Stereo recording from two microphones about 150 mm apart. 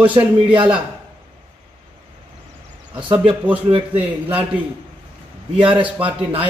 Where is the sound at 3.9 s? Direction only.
10° right (ahead or behind).